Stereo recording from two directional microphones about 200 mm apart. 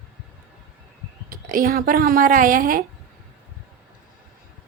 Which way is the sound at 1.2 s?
45° right (ahead or behind).